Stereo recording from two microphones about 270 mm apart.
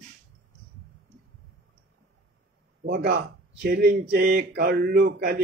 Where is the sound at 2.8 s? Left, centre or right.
Right.